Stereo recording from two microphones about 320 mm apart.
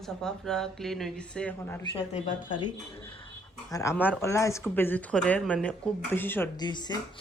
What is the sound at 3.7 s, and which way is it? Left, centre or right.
Speech, centre.